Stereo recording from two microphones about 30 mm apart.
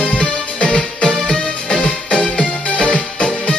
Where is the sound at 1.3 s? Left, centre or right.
Left.